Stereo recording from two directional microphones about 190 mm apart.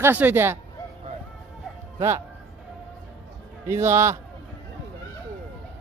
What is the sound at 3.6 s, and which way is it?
Speech, 15° right (ahead or behind).